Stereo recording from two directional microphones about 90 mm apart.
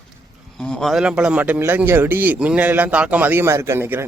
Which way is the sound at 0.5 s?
5° left (ahead or behind).